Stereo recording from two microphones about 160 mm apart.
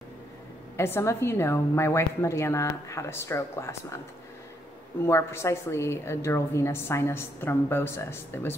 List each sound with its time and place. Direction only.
0.7 s a woman's voice: 15° left (ahead or behind)
5.0 s a woman's voice: 15° left (ahead or behind)